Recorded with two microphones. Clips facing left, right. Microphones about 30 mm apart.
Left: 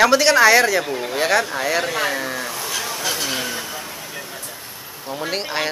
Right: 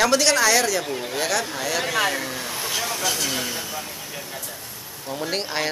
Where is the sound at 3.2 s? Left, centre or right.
Centre.